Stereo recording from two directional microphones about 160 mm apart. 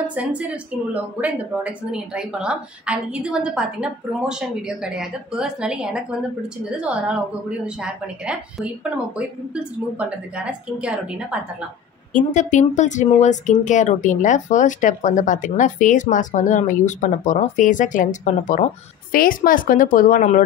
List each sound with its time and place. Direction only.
0.0 s a woman's voice: 10° right (ahead or behind)
12.1 s speech: 50° left (ahead or behind)